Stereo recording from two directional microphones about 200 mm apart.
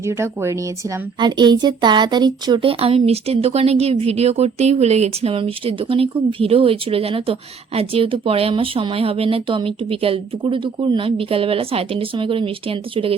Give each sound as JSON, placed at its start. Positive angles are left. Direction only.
{"t": 0.0, "sound": "speech", "side_deg": -15}